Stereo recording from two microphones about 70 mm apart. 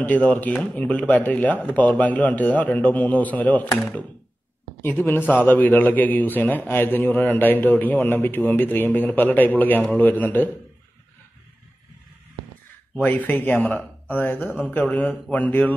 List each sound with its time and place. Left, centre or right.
0.0 s a man's voice: left
4.8 s a man's voice: left
13.0 s a man's voice: left